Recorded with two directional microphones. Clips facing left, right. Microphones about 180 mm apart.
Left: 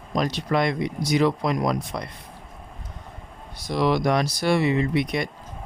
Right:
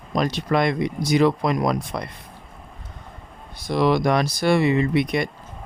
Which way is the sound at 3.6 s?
55° right (ahead or behind).